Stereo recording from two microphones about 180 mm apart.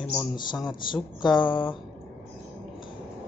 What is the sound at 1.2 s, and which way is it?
Speech, 25° left (ahead or behind).